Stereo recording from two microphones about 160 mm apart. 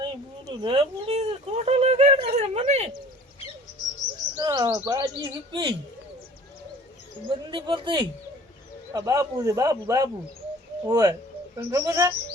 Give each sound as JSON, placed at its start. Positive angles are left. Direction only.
{"t": 0.0, "sound": "speech", "side_deg": -30}
{"t": 4.4, "sound": "speech", "side_deg": -25}
{"t": 7.3, "sound": "speech", "side_deg": -30}